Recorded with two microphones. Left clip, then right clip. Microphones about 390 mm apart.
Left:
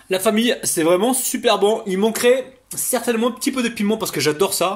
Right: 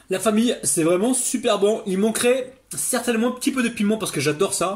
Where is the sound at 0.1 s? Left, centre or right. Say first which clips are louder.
Left 3 dB; centre.